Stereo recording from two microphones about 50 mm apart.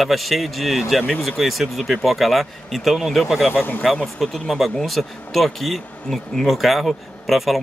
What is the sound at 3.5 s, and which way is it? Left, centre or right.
Speech, left.